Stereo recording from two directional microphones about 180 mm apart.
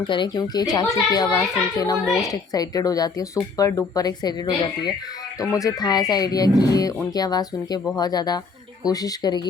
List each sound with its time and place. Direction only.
0.0 s speech: 25° left (ahead or behind)